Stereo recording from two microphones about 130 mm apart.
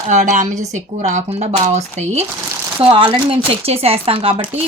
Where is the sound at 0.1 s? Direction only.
70° right (ahead or behind).